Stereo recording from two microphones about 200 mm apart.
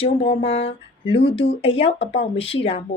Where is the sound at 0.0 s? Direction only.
30° left (ahead or behind).